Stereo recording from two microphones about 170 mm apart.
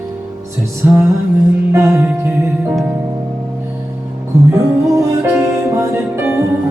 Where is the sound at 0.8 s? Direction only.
15° right (ahead or behind).